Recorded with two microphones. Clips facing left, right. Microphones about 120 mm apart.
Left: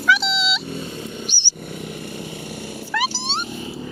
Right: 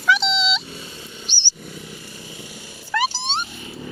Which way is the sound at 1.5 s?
55° left (ahead or behind).